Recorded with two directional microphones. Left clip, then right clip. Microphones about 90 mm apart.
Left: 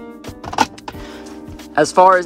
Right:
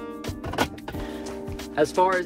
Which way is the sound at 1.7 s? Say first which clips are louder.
Left 10 dB; 90° left.